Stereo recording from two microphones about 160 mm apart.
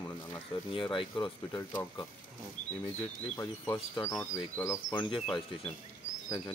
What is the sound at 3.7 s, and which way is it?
Speech, 25° left (ahead or behind).